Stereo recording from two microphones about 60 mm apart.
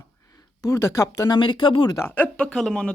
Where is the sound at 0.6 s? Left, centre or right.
Left.